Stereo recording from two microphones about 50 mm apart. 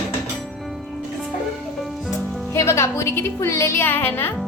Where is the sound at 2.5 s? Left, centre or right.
Left.